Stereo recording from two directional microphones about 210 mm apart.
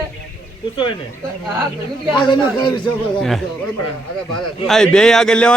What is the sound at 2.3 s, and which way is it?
Speech, 20° left (ahead or behind).